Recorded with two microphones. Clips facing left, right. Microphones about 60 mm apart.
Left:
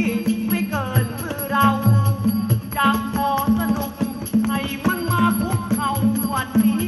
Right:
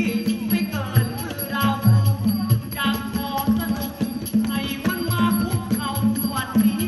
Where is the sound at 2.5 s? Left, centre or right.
Left.